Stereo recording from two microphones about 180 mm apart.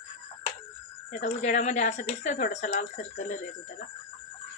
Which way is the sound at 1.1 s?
45° left (ahead or behind).